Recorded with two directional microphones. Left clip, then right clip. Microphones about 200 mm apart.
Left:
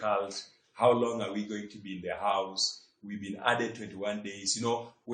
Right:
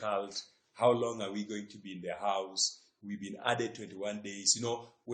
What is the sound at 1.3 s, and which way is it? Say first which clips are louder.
Speech: left 3 dB; 45° right (ahead or behind).